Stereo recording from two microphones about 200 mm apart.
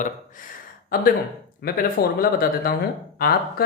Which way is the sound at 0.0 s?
40° left (ahead or behind).